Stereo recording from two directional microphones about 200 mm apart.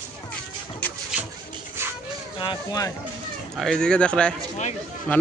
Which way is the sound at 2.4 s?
20° left (ahead or behind).